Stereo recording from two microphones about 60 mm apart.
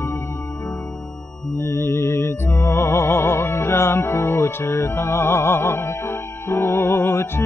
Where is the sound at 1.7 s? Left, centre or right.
Left.